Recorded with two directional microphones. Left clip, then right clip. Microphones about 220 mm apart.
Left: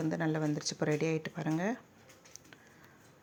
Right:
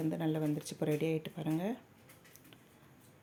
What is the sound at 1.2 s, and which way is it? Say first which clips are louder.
Speech: left 3 dB; 5° left (ahead or behind).